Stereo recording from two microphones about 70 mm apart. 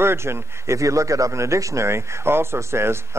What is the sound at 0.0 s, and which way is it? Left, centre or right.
Speech, right.